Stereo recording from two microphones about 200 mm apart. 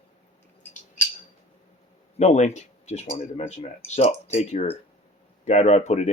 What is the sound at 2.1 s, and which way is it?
Speech, 35° left (ahead or behind).